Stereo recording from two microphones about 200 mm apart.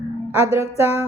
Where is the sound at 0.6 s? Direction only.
15° right (ahead or behind).